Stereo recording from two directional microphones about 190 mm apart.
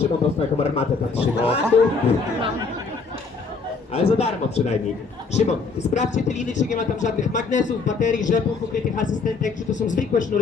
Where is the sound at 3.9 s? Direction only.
35° left (ahead or behind).